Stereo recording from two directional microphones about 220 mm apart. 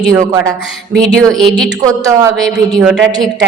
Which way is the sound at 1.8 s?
15° right (ahead or behind).